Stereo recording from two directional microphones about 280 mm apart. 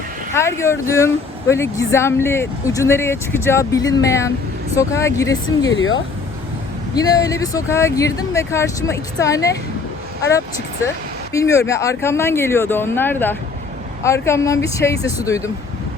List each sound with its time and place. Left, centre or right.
0.3 s speech: centre
5.7 s speech: left
6.9 s speech: centre
10.8 s speech: centre